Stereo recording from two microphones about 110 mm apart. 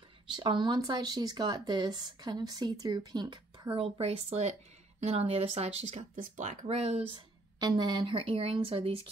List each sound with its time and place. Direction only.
0.3 s speech: 45° right (ahead or behind)
3.7 s speech: 60° right (ahead or behind); by 7.0 s 85° right
7.2 s speech: 40° right (ahead or behind); by 9.1 s 60° right (ahead or behind)